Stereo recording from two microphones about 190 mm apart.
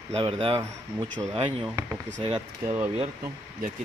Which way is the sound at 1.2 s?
20° right (ahead or behind).